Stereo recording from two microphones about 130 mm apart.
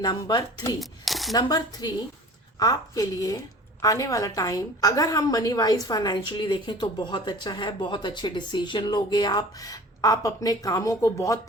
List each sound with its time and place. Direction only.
0.0 s speech: 30° left (ahead or behind)
0.8 s speech: centre (ahead or behind)
1.3 s a woman's voice: 30° left (ahead or behind)